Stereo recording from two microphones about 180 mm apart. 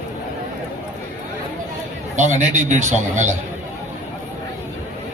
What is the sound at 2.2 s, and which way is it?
A man's voice, 40° right (ahead or behind).